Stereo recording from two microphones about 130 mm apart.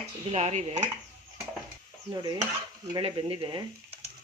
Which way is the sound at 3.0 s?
45° right (ahead or behind).